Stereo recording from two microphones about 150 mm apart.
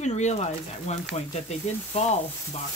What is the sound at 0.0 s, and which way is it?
Speech, 50° left (ahead or behind).